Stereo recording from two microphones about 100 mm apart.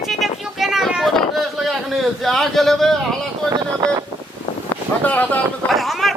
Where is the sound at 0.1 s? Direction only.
Centre (ahead or behind).